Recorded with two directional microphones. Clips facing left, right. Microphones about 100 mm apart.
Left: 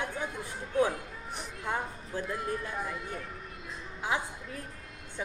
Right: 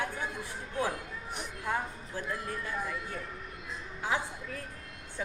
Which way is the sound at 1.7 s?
20° left (ahead or behind).